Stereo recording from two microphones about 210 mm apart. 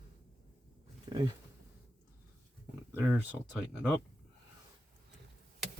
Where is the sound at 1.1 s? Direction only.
20° right (ahead or behind).